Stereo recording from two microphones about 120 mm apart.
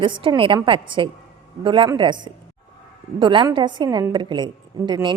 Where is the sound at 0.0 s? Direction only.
45° right (ahead or behind).